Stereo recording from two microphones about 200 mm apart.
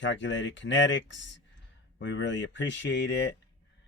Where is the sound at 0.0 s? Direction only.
65° left (ahead or behind).